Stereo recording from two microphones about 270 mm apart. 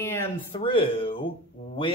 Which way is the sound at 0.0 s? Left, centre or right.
Centre.